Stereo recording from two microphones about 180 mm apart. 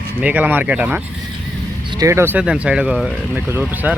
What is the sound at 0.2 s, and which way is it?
Speech, 10° right (ahead or behind).